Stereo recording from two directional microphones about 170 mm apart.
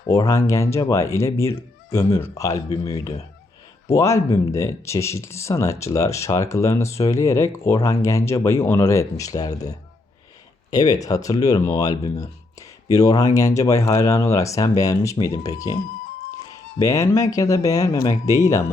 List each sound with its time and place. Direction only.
0.1 s speech: 20° left (ahead or behind)
3.9 s speech: 15° left (ahead or behind)
10.7 s speech: 20° left (ahead or behind)